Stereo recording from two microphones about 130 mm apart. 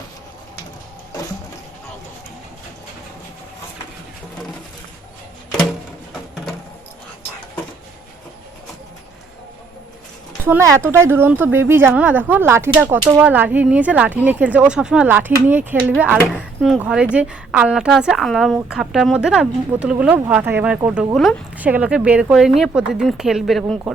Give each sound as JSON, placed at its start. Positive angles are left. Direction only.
{"t": 10.4, "sound": "a woman's voice", "side_deg": -20}